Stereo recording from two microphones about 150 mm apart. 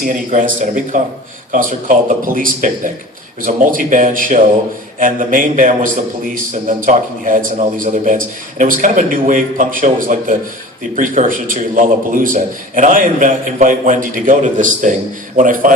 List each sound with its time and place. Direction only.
0.0 s a man's voice: 60° right (ahead or behind)